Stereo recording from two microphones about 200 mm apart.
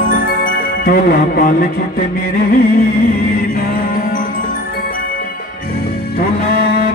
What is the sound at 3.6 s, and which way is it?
Music, 45° left (ahead or behind).